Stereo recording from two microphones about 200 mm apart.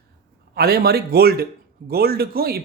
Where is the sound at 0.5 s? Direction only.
50° right (ahead or behind).